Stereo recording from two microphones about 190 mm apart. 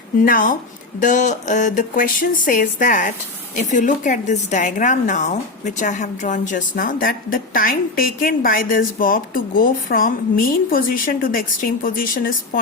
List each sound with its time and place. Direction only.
0.3 s a woman's voice: 45° left (ahead or behind)